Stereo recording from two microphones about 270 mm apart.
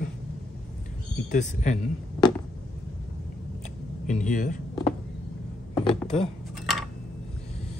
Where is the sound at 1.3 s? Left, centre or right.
Left.